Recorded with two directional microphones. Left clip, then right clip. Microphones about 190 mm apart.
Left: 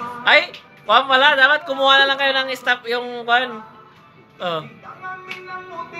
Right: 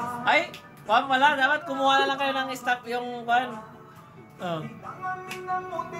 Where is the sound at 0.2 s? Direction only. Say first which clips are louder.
Left 9 dB; 40° left (ahead or behind).